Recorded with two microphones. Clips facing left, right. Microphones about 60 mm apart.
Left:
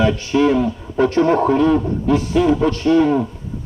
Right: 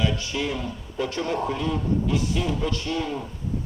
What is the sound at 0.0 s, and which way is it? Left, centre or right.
Cattle, left.